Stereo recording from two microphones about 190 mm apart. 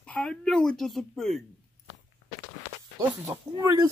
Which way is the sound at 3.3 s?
20° right (ahead or behind).